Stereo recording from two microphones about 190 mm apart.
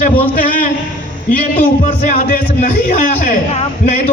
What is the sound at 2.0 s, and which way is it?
A man's voice, 35° left (ahead or behind).